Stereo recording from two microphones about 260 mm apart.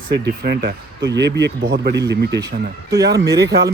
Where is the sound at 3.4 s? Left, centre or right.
Right.